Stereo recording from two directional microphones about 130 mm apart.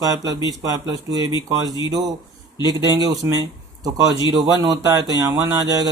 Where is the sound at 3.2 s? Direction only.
20° right (ahead or behind).